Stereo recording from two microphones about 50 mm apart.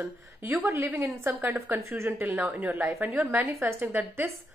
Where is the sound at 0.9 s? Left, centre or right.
Right.